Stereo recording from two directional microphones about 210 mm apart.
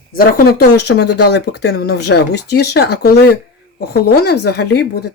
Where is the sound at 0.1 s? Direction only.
45° left (ahead or behind).